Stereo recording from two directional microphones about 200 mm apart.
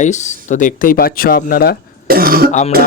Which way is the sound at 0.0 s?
35° left (ahead or behind).